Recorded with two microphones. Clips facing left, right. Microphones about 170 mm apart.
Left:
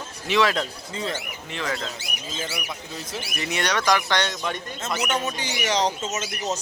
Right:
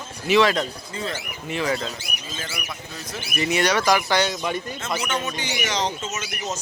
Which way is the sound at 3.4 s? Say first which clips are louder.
Right 5 dB; 5° right (ahead or behind).